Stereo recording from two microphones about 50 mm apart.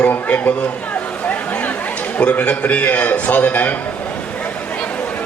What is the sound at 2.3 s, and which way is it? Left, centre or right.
A man's voice, left.